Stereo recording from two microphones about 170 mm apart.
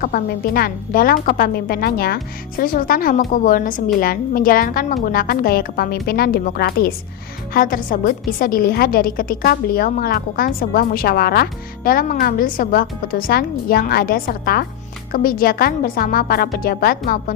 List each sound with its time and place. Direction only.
0.0 s a woman's voice: 60° left (ahead or behind)
7.5 s a woman's voice: 55° left (ahead or behind)